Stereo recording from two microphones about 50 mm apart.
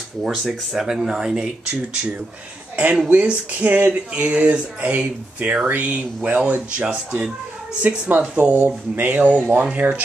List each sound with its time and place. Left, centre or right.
0.2 s speech: centre
2.7 s speech: right